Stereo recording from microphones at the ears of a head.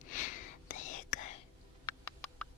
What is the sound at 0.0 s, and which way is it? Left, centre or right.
Whispering, left.